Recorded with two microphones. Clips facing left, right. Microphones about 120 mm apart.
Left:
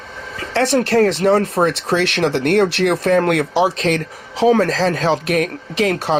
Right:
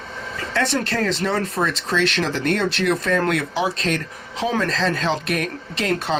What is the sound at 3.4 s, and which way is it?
Speech, 40° left (ahead or behind).